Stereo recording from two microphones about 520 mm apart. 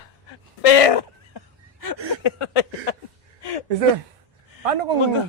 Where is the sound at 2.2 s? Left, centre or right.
Left.